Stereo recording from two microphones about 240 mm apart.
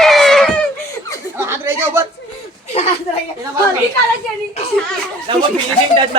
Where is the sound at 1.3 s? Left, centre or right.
Centre.